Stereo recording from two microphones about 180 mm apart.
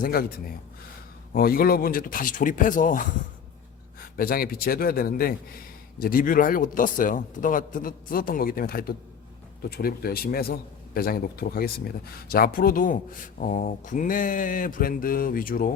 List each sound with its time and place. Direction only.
0.0 s a man's voice: 55° left (ahead or behind)